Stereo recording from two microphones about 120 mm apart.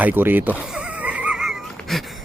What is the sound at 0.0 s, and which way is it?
Speech, 15° right (ahead or behind).